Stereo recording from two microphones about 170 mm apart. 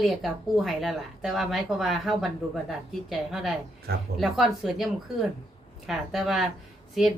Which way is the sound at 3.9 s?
65° right (ahead or behind).